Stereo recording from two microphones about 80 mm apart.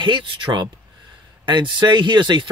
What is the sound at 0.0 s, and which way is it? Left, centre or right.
Speech, right.